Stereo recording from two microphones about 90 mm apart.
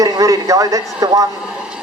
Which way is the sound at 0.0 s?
40° right (ahead or behind).